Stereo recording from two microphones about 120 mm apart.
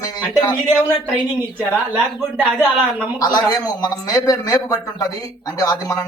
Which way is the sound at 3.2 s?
35° left (ahead or behind).